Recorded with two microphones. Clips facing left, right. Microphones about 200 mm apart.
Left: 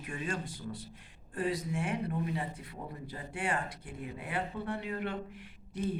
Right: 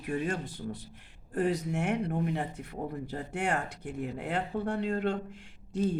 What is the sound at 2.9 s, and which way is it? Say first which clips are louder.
A woman's voice: right 6 dB; 65° right (ahead or behind).